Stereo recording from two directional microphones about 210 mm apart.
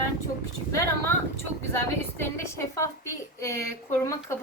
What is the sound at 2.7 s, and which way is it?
A woman's voice, 15° left (ahead or behind).